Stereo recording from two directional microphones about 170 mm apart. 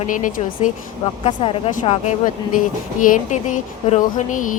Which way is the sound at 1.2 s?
35° left (ahead or behind).